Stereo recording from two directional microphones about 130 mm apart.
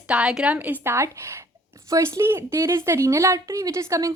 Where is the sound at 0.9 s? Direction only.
20° right (ahead or behind).